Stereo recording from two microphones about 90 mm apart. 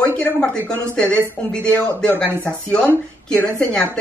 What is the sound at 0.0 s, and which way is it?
Speech, 15° left (ahead or behind).